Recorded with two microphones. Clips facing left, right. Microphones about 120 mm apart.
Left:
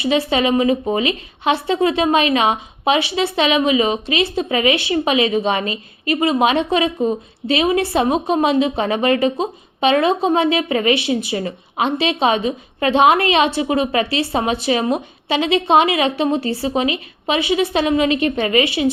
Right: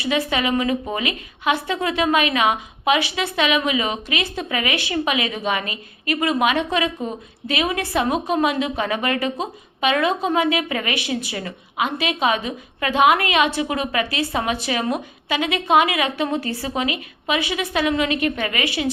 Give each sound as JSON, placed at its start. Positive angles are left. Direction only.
{"t": 0.0, "sound": "a woman's voice", "side_deg": 25}